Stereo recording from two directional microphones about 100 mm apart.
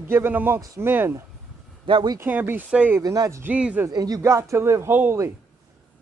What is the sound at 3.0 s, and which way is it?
Speech, 35° right (ahead or behind).